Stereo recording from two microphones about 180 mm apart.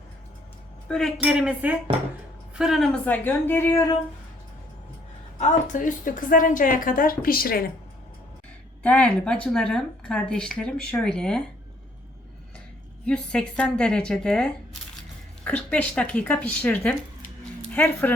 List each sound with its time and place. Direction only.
0.9 s a woman's voice: 5° left (ahead or behind)
5.4 s a woman's voice: 45° left (ahead or behind)
8.8 s a woman's voice: 5° left (ahead or behind)
13.1 s a woman's voice: 5° left (ahead or behind)